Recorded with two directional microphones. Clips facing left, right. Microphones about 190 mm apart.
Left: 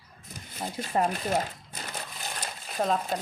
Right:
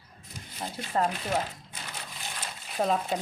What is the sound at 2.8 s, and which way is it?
Speech, centre (ahead or behind).